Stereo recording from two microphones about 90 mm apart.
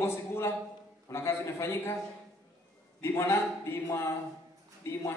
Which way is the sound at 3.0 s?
30° left (ahead or behind).